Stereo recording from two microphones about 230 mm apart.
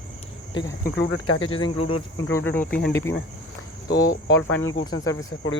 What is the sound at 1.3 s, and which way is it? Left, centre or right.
Speech, left.